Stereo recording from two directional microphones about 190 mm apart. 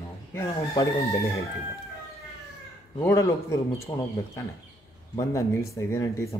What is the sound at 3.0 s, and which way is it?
Speech, 15° left (ahead or behind).